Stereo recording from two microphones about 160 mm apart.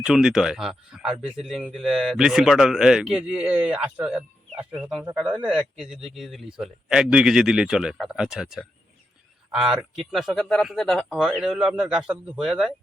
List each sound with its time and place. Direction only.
0.0 s speech: 5° right (ahead or behind)